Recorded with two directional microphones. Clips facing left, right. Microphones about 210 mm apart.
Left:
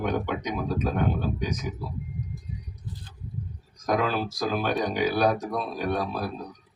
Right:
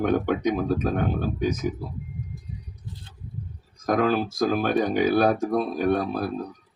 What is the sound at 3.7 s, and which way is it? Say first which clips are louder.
Speech: right 4 dB; 50° right (ahead or behind).